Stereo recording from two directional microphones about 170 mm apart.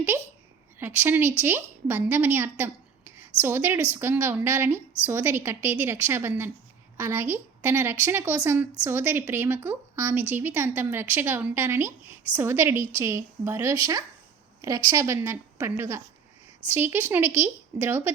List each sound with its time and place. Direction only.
0.8 s a woman's voice: 10° right (ahead or behind)